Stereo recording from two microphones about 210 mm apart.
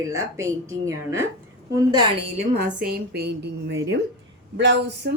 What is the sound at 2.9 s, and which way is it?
A woman's voice, 50° right (ahead or behind).